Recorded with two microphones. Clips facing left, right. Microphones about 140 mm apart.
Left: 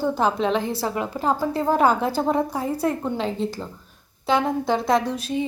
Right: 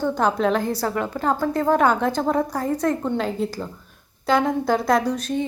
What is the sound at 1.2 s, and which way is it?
Speech, 15° left (ahead or behind).